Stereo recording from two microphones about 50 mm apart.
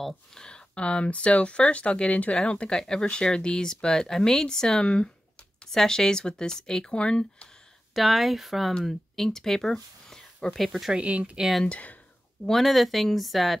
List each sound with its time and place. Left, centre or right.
0.3 s speech: centre
7.9 s speech: centre
10.9 s speech: right
11.6 s speech: left
12.4 s speech: centre